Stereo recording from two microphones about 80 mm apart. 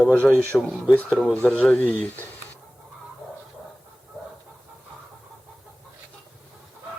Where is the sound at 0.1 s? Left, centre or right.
Centre.